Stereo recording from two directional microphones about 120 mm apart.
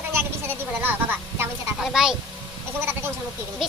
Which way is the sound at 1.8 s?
5° right (ahead or behind).